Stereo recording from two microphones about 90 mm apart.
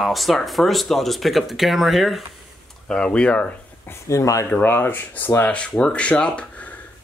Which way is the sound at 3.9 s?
35° left (ahead or behind).